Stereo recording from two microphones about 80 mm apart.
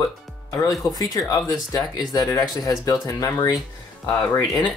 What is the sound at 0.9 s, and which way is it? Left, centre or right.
Speech, left.